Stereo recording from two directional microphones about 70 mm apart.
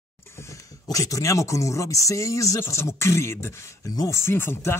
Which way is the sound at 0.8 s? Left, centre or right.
Left.